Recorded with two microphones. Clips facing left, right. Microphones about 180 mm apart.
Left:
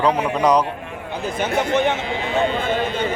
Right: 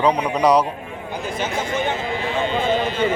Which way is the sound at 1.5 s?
65° left (ahead or behind).